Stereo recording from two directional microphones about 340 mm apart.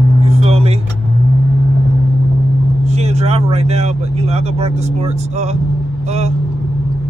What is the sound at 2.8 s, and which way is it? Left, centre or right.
Speech, centre.